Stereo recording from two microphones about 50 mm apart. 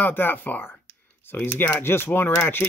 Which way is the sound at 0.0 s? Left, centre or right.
Left.